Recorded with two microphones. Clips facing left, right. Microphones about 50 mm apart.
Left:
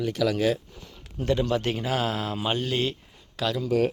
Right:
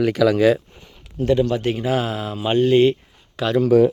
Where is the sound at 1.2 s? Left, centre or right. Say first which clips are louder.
Right 6 dB; centre.